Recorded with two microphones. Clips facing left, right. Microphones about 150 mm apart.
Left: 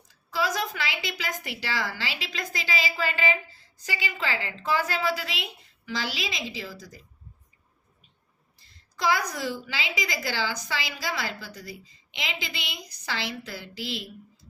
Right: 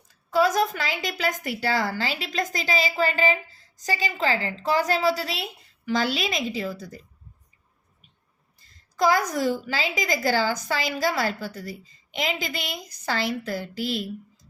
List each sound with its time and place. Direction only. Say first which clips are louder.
0.1 s a woman's voice: right 7 dB; 50° right (ahead or behind)
8.5 s a sound: right 12 dB; 45° right (ahead or behind)
9.3 s a woman's voice: right 7 dB; 45° right (ahead or behind)